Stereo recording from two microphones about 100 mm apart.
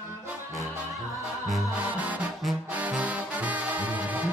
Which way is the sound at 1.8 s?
15° right (ahead or behind).